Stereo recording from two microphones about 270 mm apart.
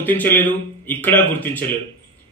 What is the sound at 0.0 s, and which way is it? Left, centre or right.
A man's voice, centre.